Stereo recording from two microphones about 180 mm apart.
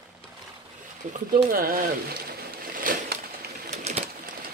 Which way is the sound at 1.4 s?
55° right (ahead or behind).